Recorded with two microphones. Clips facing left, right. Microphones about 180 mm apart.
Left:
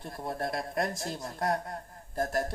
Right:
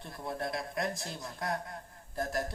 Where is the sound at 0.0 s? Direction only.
45° left (ahead or behind).